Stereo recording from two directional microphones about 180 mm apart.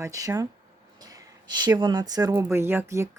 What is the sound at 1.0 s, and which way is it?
Snort, 20° right (ahead or behind).